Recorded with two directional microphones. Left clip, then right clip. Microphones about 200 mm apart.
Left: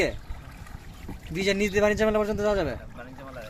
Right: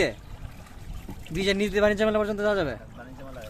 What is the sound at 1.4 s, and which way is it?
Speech, 10° left (ahead or behind).